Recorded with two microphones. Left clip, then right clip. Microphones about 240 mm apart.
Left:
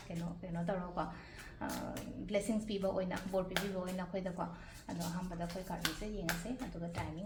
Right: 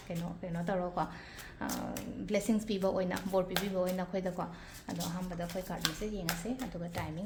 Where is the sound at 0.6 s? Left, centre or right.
Right.